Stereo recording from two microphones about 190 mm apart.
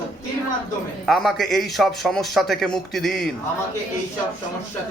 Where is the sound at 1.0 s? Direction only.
Centre (ahead or behind).